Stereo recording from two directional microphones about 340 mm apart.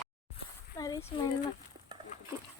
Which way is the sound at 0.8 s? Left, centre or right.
Centre.